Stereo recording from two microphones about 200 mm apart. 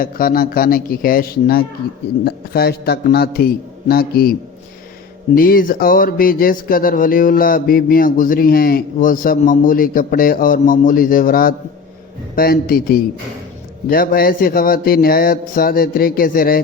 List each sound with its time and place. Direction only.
0.0 s speech: 45° left (ahead or behind)